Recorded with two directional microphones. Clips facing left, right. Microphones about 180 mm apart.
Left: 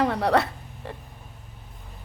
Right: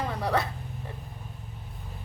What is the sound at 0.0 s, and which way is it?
Speech, 70° left (ahead or behind).